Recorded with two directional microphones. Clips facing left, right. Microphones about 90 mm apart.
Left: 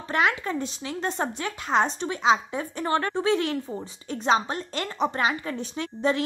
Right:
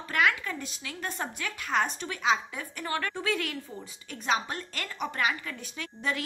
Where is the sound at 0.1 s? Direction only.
25° left (ahead or behind).